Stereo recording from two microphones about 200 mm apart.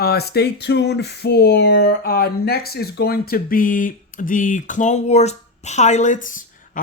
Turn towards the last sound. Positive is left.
turn(degrees=40)  # may be behind; listen again after turning